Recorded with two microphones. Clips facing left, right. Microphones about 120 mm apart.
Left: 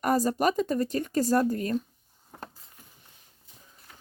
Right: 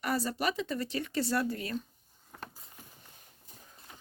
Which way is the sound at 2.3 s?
30° left (ahead or behind).